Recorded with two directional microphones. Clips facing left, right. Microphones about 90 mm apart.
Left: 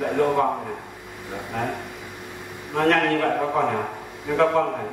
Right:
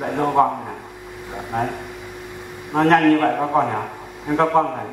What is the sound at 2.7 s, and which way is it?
A man's voice, 25° right (ahead or behind).